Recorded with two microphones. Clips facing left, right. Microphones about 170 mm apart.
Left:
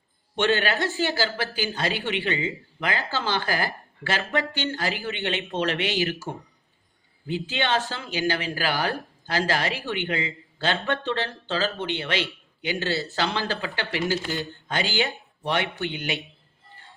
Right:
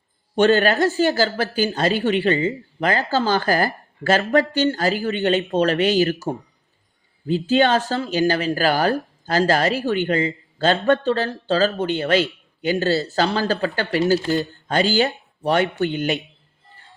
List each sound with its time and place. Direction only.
0.3 s a man's voice: 40° right (ahead or behind)